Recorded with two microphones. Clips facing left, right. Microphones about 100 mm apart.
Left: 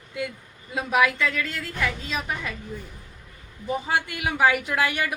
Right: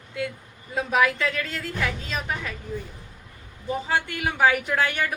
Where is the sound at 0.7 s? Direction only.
5° left (ahead or behind).